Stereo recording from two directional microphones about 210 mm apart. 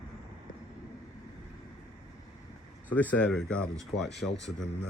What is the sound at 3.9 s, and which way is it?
Speech, 55° left (ahead or behind).